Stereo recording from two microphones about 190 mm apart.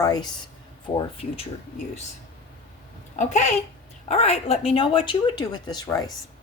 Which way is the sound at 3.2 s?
40° left (ahead or behind).